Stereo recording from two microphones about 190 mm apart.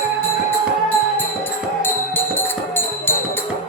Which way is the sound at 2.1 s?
10° left (ahead or behind).